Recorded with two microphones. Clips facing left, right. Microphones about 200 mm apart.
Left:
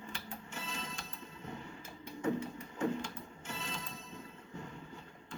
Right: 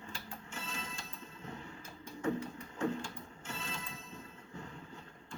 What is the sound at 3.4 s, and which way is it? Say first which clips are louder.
Music: even; centre (ahead or behind).